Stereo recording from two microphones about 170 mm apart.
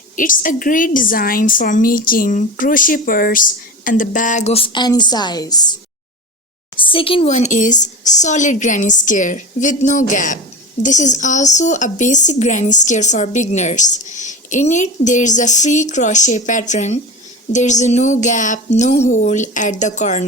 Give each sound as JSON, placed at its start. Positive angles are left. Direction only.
{"t": 0.2, "sound": "a woman's voice", "side_deg": 50}
{"t": 6.7, "sound": "a woman's voice", "side_deg": 30}